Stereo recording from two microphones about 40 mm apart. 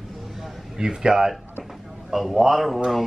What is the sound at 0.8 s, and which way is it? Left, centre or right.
Speech, centre.